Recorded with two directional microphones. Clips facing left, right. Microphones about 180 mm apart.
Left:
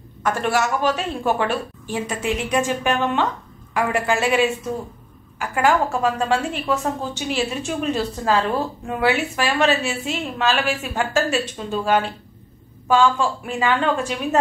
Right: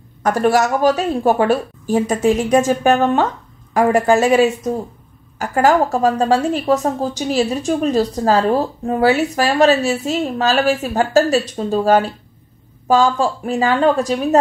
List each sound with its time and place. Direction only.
0.2 s a woman's voice: 40° right (ahead or behind)